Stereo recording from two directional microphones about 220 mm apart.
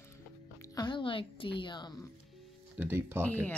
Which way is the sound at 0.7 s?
20° left (ahead or behind).